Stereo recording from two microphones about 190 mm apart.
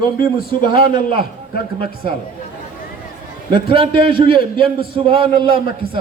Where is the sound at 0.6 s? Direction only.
25° right (ahead or behind).